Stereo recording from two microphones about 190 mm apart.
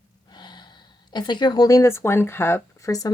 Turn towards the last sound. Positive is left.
turn(degrees=20)  # may be behind; listen again after turning